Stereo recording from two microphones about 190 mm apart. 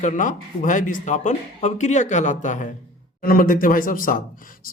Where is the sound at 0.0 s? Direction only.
45° left (ahead or behind).